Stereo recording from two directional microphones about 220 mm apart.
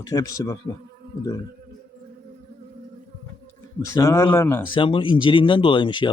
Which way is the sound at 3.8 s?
15° left (ahead or behind).